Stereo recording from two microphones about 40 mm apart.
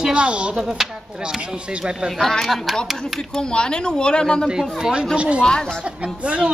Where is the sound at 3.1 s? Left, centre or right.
Centre.